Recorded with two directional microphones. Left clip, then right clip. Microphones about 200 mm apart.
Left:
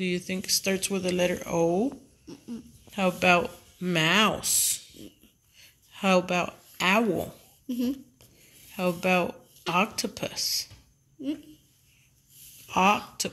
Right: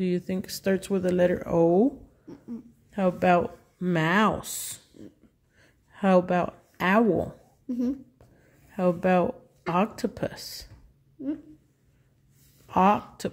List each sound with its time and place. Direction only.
0.0 s speech: 35° right (ahead or behind)
1.3 s speech: 25° right (ahead or behind)
2.9 s speech: 25° right (ahead or behind)
5.9 s speech: 35° right (ahead or behind)
7.6 s speech: 10° right (ahead or behind)
8.7 s speech: 35° right (ahead or behind)
12.6 s speech: 40° right (ahead or behind)